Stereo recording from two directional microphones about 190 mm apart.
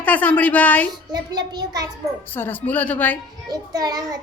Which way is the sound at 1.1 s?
20° right (ahead or behind).